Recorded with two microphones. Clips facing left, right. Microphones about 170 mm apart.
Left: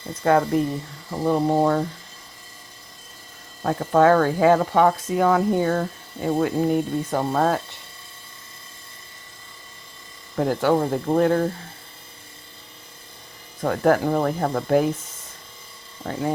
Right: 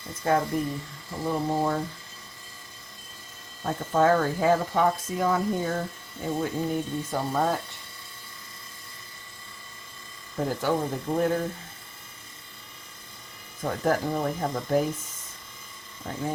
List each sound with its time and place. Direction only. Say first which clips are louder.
0.2 s speech: left 6 dB; 75° left (ahead or behind)
3.6 s speech: left 6 dB; 80° left; by 7.6 s 60° left (ahead or behind)
10.3 s speech: left 6 dB; 80° left
13.6 s speech: left 6 dB; 75° left (ahead or behind)